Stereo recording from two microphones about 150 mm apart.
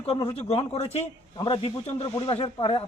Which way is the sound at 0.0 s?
40° left (ahead or behind).